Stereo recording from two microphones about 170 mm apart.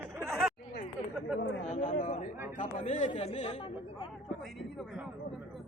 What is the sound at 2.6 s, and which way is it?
Speech, 45° left (ahead or behind).